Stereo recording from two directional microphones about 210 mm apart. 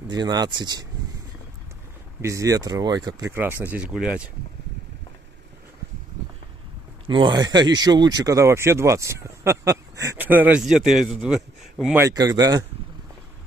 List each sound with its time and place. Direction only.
0.1 s speech: 20° right (ahead or behind)
2.2 s speech: 15° right (ahead or behind)
7.1 s speech: 20° right (ahead or behind); by 12.0 s centre (ahead or behind)
12.0 s speech: 15° right (ahead or behind)